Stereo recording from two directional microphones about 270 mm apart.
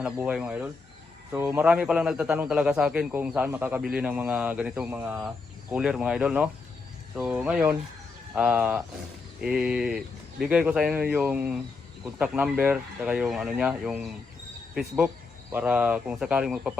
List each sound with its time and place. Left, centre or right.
0.0 s speech: centre